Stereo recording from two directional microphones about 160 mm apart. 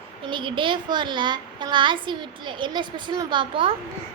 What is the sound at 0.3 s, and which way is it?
A child's voice, 30° right (ahead or behind).